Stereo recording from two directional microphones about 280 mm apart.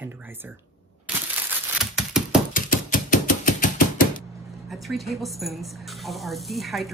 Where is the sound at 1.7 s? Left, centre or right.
Centre.